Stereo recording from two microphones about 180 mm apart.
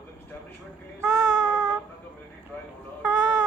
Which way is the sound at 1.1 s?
20° right (ahead or behind).